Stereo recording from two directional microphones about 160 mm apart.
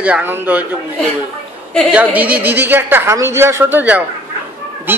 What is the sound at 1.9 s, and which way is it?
A man's voice, 10° right (ahead or behind).